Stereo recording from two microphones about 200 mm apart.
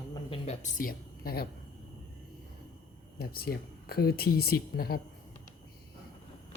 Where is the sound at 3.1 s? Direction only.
50° left (ahead or behind).